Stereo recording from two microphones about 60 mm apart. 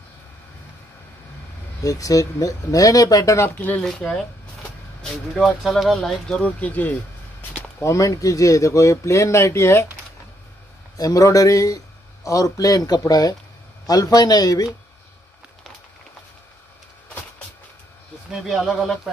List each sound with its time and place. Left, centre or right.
1.8 s speech: left
3.4 s speech: left
5.0 s speech: centre
6.3 s speech: left
7.8 s speech: left
11.0 s speech: left
18.5 s speech: centre